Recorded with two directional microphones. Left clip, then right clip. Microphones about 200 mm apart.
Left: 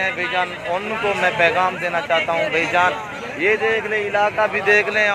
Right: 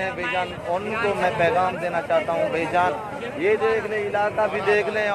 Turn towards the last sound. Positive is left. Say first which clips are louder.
# left 5 dB
turn(degrees=15)  # may be behind; listen again after turning